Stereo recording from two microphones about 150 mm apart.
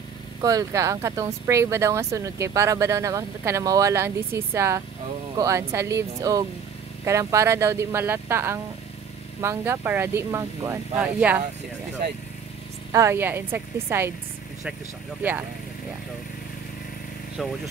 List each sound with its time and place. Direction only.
0.4 s speech: 25° right (ahead or behind)
12.9 s speech: 20° right (ahead or behind)
17.4 s speech: centre (ahead or behind)